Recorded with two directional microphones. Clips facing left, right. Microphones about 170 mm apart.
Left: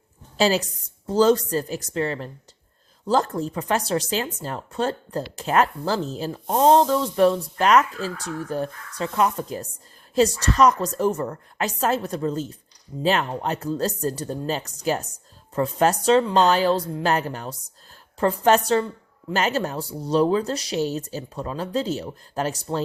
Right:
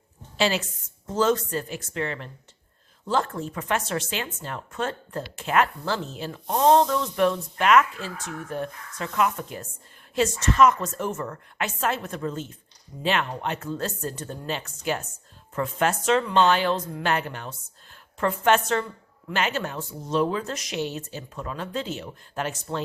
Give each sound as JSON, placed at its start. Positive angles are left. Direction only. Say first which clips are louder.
{"t": 0.3, "sound": "speech", "louder": "left 4 dB", "side_deg": 40}